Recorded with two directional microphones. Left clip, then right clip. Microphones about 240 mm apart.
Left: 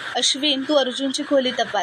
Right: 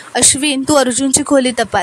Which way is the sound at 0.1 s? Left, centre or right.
Right.